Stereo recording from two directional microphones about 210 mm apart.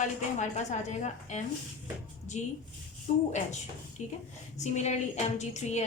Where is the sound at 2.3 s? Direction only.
35° left (ahead or behind).